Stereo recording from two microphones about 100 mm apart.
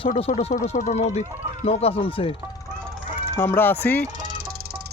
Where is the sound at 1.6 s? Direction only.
85° left; by 2.3 s 65° left (ahead or behind).